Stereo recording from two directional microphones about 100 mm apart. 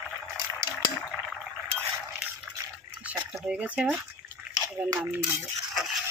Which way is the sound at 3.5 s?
15° right (ahead or behind).